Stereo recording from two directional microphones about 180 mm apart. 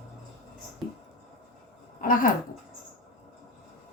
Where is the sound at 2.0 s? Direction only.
50° left (ahead or behind).